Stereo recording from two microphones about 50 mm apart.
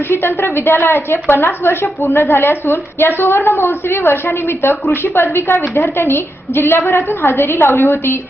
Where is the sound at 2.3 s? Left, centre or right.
Left.